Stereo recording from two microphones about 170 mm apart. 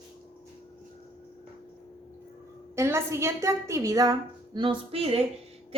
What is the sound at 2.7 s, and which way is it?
A woman's voice, 15° right (ahead or behind).